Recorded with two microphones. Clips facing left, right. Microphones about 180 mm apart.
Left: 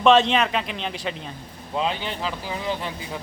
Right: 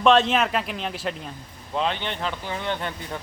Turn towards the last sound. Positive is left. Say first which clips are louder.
# even
turn(degrees=5)  # may be behind; listen again after turning